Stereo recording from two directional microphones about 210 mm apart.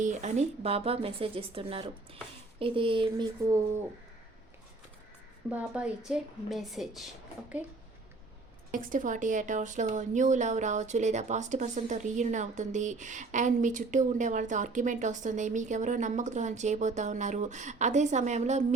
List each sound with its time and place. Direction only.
0.0 s speech: 35° right (ahead or behind)
5.5 s a woman's voice: 5° right (ahead or behind)
8.7 s a woman's voice: 40° right (ahead or behind)